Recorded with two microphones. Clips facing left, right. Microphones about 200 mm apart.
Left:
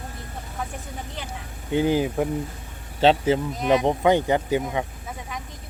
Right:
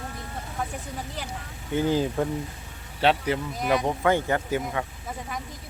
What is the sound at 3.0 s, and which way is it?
Speech, 25° left (ahead or behind).